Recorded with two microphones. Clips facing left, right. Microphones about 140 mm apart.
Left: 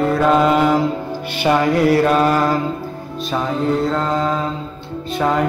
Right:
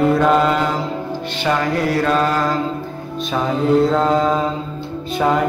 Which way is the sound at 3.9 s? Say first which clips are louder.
Right 3 dB; 10° right (ahead or behind).